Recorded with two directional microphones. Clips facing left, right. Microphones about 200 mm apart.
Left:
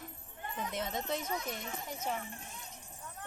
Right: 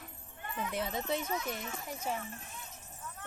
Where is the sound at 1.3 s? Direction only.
30° left (ahead or behind).